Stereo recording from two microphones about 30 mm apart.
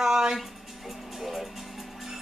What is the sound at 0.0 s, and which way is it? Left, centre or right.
Music, centre.